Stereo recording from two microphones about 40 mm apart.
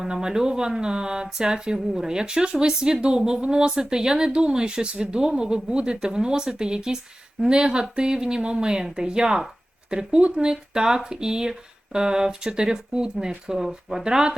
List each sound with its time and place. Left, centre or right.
0.0 s a woman's voice: centre